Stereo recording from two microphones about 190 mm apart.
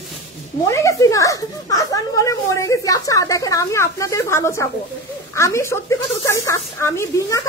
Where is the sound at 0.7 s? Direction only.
15° left (ahead or behind).